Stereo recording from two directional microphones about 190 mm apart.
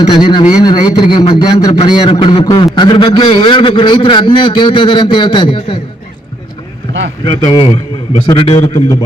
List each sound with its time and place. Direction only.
0.1 s a man's voice: 25° left (ahead or behind)
7.3 s a man's voice: 25° left (ahead or behind)